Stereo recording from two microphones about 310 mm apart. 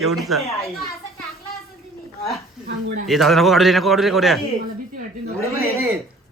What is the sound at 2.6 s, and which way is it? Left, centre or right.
Speech, right.